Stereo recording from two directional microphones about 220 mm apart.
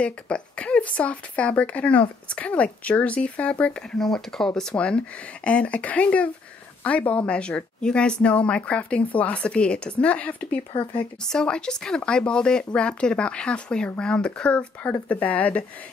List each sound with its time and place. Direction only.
0.0 s speech: 5° left (ahead or behind)
10.7 s speech: 20° left (ahead or behind)
11.2 s speech: 5° left (ahead or behind)